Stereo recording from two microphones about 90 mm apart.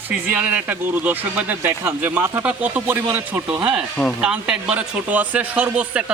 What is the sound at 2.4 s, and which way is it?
Speech, 15° right (ahead or behind).